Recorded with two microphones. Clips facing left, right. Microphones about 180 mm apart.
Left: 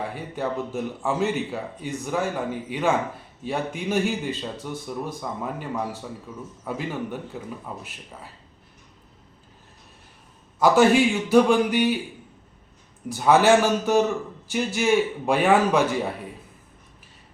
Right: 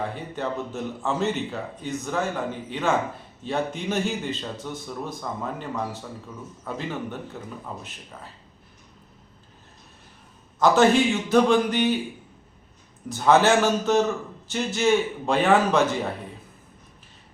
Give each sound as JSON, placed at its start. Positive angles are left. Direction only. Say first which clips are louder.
{"t": 0.1, "sound": "a man's voice", "louder": "left 1 dB", "side_deg": 10}
{"t": 10.6, "sound": "a man's voice", "louder": "left 1 dB", "side_deg": 10}
{"t": 13.1, "sound": "a man's voice", "louder": "left 1 dB", "side_deg": 10}